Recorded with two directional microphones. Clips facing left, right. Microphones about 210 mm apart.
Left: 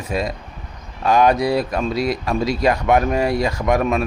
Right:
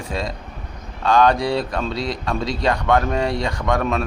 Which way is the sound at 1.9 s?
25° right (ahead or behind).